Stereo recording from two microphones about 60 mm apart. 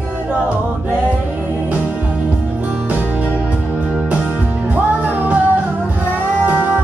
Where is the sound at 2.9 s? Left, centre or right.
Right.